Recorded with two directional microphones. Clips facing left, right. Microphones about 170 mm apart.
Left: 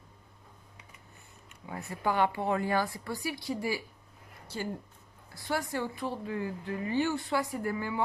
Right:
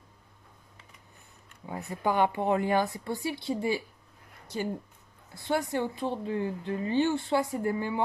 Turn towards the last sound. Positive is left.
turn(degrees=-25)  # may be behind; listen again after turning